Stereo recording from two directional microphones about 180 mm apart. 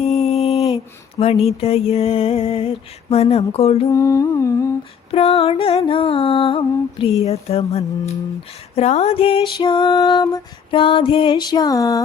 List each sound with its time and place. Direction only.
0.0 s mantra: 35° left (ahead or behind)
3.9 s humming: 15° left (ahead or behind)
5.1 s a sound: 35° left (ahead or behind)
8.7 s music: 35° left (ahead or behind); by 12.0 s 20° left (ahead or behind)